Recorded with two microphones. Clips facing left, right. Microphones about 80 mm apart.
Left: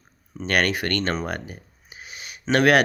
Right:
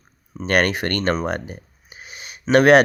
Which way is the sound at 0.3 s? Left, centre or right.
Right.